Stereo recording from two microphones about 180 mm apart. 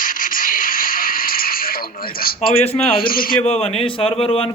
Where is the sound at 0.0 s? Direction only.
50° left (ahead or behind).